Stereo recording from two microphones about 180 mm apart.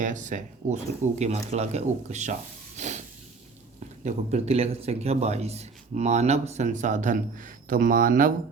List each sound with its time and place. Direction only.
0.0 s a man's voice: 45° right (ahead or behind)
2.7 s hiss: 40° right (ahead or behind)
4.0 s a man's voice: 35° right (ahead or behind)